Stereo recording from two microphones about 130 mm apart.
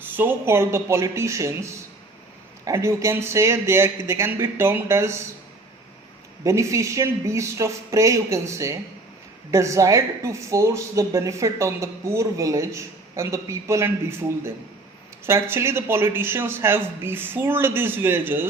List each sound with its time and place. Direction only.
0.0 s speech: 15° right (ahead or behind)
6.4 s a man's voice: 25° right (ahead or behind)